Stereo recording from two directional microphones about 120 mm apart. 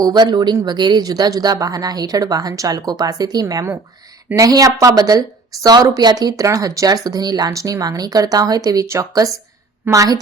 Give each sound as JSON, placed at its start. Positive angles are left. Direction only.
{"t": 0.0, "sound": "speech", "side_deg": -35}